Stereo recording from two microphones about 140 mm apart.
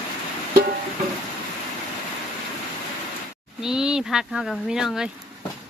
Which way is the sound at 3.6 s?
5° right (ahead or behind).